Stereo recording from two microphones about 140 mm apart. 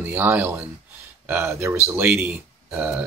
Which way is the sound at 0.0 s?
15° right (ahead or behind).